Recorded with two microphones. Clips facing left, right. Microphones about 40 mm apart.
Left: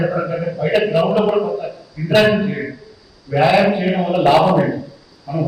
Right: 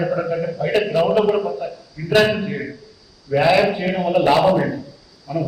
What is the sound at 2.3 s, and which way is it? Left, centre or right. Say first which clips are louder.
A man's voice: left 5 dB; left.